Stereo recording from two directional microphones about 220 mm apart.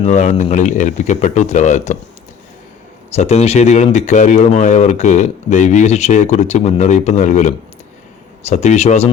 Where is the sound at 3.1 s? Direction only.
30° left (ahead or behind).